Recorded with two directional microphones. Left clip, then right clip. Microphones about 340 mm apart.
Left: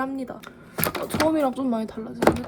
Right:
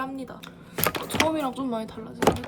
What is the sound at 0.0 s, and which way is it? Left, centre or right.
A woman's voice, centre.